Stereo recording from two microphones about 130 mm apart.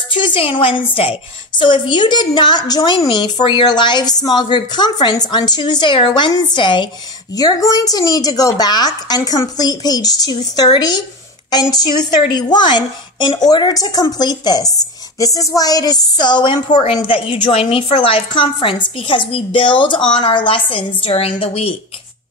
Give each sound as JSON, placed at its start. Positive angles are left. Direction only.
{"t": 0.1, "sound": "a woman's voice", "side_deg": 40}
{"t": 12.3, "sound": "a woman's voice", "side_deg": 35}